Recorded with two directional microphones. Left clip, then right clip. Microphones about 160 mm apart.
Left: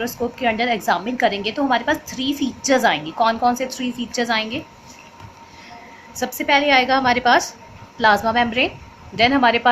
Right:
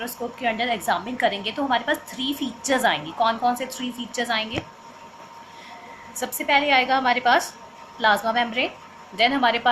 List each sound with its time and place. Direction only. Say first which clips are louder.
0.0 s a woman's voice: left 5 dB; 50° left (ahead or behind)
6.1 s a woman's voice: left 3 dB; 45° left (ahead or behind)